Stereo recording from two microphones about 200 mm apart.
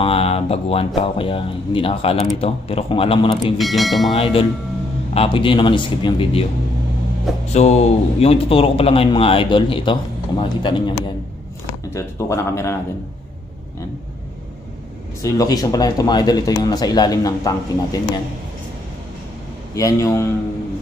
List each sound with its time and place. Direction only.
0.0 s a man's voice: 30° left (ahead or behind)
3.5 s speech: centre (ahead or behind)
4.1 s a man's voice: 30° left (ahead or behind)
7.4 s a man's voice: 35° left (ahead or behind); by 12.7 s 15° left (ahead or behind)
15.2 s a man's voice: 20° left (ahead or behind)
19.7 s speech: 15° left (ahead or behind)